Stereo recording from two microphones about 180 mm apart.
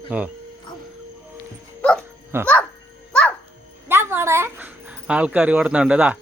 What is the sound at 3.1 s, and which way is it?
Music, 5° left (ahead or behind).